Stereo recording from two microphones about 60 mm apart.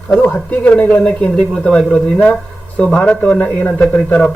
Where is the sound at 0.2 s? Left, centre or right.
Left.